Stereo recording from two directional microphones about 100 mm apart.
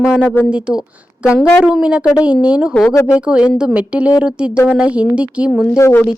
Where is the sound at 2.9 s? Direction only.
30° left (ahead or behind).